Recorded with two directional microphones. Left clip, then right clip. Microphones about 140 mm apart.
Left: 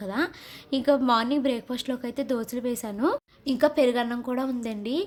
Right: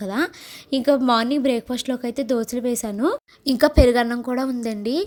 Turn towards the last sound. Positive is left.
turn(degrees=-40)  # may be behind; listen again after turning